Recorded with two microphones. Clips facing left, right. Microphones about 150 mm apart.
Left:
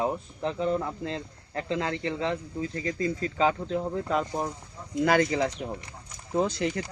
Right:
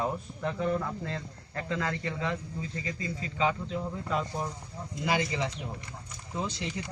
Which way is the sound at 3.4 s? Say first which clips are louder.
Left 3 dB; 40° left (ahead or behind).